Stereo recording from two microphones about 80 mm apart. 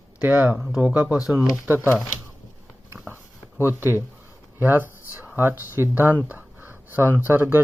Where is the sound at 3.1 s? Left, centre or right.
Right.